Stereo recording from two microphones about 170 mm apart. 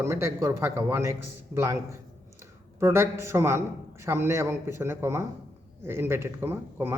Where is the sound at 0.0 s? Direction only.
15° right (ahead or behind).